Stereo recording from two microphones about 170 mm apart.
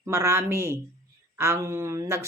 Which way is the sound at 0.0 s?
15° right (ahead or behind).